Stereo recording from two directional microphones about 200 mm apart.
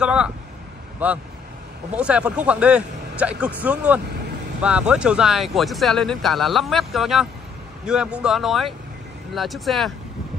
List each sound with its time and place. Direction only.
0.0 s speech: 5° right (ahead or behind)